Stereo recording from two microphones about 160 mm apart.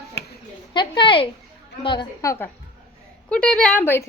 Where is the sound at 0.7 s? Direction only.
30° left (ahead or behind).